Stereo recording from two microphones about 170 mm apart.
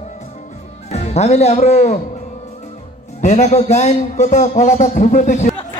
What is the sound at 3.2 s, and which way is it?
A man's voice, 40° left (ahead or behind).